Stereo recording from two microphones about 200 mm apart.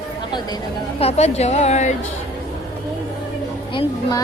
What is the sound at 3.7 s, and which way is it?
Speech, 25° left (ahead or behind).